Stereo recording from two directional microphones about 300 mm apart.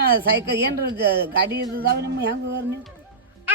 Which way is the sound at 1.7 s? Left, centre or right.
Right.